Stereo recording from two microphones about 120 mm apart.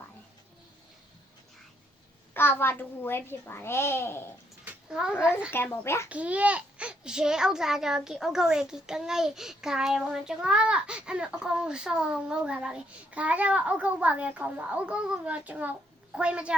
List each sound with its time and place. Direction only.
2.3 s a child's voice: 15° left (ahead or behind)
4.6 s a sound: 5° right (ahead or behind)
5.5 s a child's voice: 15° left (ahead or behind)
6.1 s a child's voice: 10° right (ahead or behind)